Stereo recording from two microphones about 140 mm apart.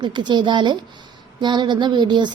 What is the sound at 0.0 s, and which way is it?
A woman's voice, 30° right (ahead or behind).